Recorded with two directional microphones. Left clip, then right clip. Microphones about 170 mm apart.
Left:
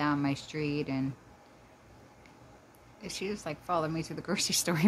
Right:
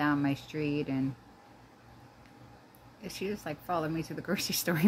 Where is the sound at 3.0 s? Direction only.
5° left (ahead or behind).